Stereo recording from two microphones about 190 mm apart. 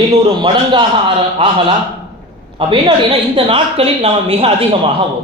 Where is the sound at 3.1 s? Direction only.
30° right (ahead or behind).